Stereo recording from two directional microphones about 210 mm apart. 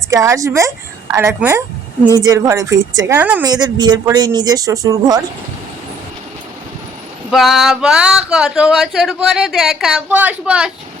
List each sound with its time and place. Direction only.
0.1 s a woman's voice: 15° right (ahead or behind)
3.5 s speech: 20° right (ahead or behind)
7.3 s speech: centre (ahead or behind)